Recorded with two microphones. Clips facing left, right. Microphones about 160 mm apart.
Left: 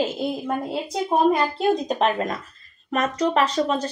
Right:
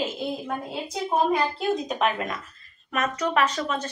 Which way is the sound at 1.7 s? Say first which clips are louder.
Left 4 dB; 35° left (ahead or behind).